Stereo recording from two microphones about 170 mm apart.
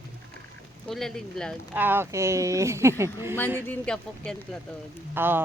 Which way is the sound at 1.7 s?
10° right (ahead or behind).